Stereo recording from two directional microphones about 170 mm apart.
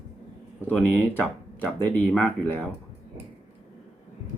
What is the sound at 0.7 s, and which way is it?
Speech, 10° left (ahead or behind).